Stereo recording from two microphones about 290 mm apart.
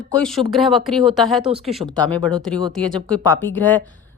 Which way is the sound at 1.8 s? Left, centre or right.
Centre.